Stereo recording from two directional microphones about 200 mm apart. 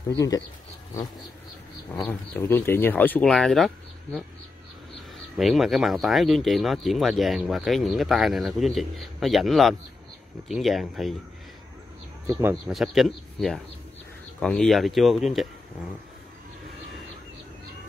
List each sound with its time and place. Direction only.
2.0 s speech: 10° left (ahead or behind)
5.4 s speech: centre (ahead or behind)
12.3 s speech: 10° right (ahead or behind)